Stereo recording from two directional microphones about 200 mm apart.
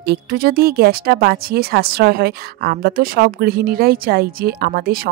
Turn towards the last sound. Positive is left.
turn(degrees=-45)  # may be behind; listen again after turning